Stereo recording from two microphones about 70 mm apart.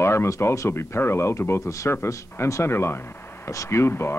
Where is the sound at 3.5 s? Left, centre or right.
Left.